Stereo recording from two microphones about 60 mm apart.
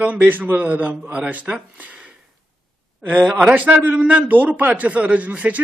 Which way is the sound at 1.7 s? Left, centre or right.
Right.